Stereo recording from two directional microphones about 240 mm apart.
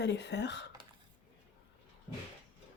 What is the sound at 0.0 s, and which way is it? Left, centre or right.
Speech, left.